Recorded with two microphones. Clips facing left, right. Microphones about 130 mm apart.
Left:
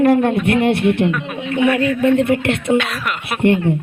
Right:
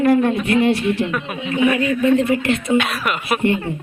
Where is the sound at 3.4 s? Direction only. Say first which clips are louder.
Left 7 dB; 65° left (ahead or behind).